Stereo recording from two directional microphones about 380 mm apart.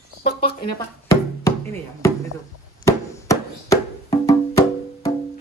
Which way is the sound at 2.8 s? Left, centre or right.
Centre.